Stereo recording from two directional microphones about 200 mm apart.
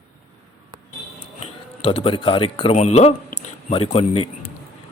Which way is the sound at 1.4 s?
30° left (ahead or behind).